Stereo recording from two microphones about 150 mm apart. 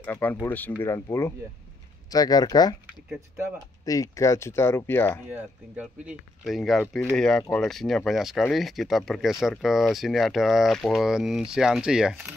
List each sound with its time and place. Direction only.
0.0 s speech: 15° left (ahead or behind)
3.8 s speech: 20° left (ahead or behind)
5.3 s speech: 5° right (ahead or behind)